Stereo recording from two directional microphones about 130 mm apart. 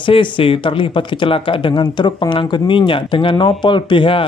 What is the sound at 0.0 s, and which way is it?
Speech, 40° left (ahead or behind).